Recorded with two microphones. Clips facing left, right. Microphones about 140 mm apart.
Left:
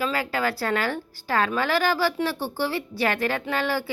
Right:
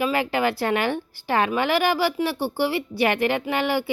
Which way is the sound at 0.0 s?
20° right (ahead or behind).